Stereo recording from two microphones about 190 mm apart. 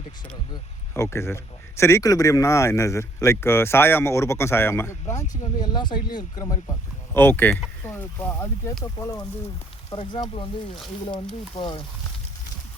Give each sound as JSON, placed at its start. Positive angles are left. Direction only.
{"t": 0.9, "sound": "speech", "side_deg": 15}
{"t": 11.5, "sound": "speech", "side_deg": 25}